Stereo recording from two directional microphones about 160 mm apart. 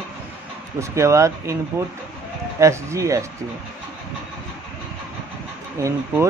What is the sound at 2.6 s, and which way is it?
Speech, 20° right (ahead or behind).